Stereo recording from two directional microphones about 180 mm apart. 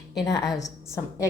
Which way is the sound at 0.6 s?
15° left (ahead or behind).